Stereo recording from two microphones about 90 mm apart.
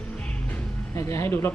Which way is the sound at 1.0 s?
30° left (ahead or behind).